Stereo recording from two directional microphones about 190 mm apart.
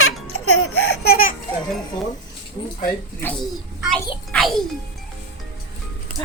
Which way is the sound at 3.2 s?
Centre (ahead or behind).